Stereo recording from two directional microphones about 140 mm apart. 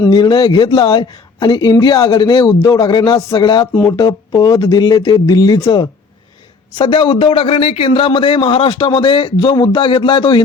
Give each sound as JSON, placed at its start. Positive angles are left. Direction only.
{"t": 0.1, "sound": "a man's voice", "side_deg": 30}